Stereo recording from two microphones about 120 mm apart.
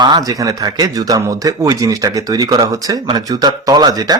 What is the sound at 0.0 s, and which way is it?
Speech, 35° right (ahead or behind).